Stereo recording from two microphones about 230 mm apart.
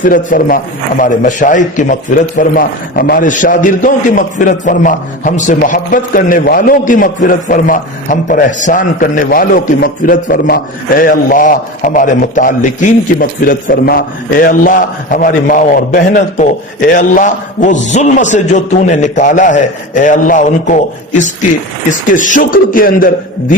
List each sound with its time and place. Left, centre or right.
0.0 s a man's voice: left